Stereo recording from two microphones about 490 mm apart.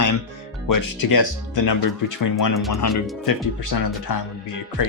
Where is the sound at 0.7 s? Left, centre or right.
Left.